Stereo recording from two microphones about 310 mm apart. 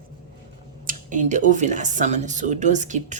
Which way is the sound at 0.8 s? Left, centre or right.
Right.